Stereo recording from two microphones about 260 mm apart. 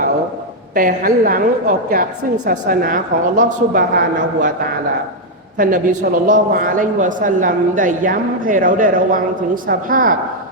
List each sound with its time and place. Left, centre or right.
0.7 s a woman's voice: right
5.5 s a woman's voice: right